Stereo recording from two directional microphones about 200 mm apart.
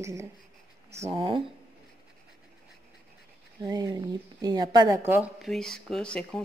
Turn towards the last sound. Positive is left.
turn(degrees=5)  # may be behind; listen again after turning